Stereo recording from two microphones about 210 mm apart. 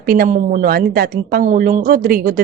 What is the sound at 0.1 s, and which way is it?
Speech, 40° right (ahead or behind).